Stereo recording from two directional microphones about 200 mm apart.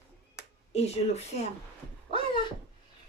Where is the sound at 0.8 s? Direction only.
30° left (ahead or behind).